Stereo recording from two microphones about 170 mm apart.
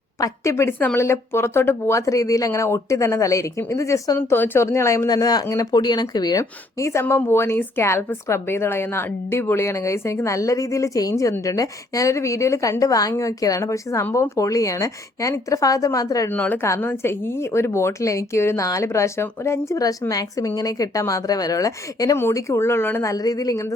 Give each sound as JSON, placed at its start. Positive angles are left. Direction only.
{"t": 0.2, "sound": "speech", "side_deg": 15}
{"t": 16.3, "sound": "speech", "side_deg": 10}